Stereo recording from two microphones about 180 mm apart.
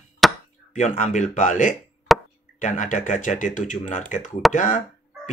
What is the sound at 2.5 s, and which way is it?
Speech, 45° left (ahead or behind).